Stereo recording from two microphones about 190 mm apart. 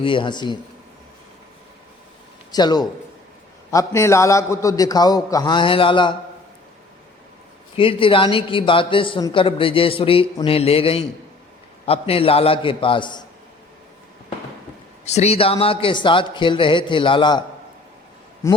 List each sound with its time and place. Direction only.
0.0 s a man's voice: 25° left (ahead or behind)
2.5 s a man's voice: 20° left (ahead or behind)
7.8 s a man's voice: 25° left (ahead or behind)
15.0 s a man's voice: 35° left (ahead or behind)
18.4 s a man's voice: 15° left (ahead or behind)